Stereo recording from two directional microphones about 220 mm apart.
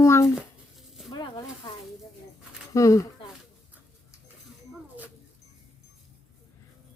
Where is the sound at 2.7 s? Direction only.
15° left (ahead or behind).